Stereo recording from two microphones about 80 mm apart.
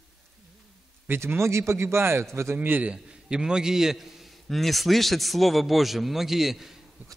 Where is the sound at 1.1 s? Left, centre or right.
Right.